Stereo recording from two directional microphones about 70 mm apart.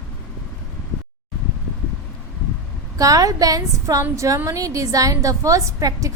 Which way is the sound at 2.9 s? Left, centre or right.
Right.